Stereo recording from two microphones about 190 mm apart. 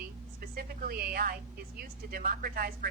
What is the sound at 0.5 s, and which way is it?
A woman's voice, 50° right (ahead or behind).